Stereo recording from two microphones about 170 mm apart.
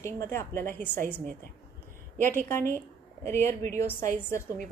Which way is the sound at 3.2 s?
15° left (ahead or behind).